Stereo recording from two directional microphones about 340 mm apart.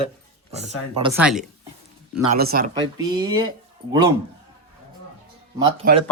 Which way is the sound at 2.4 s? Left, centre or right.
Right.